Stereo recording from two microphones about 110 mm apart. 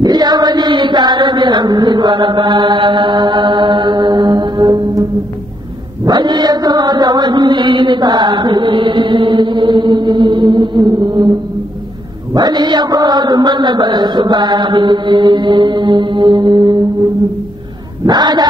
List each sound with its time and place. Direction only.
0.0 s chant: 40° right (ahead or behind)
6.0 s chant: 45° right (ahead or behind)
12.4 s a man's voice: 40° right (ahead or behind)
18.0 s speech: 40° right (ahead or behind)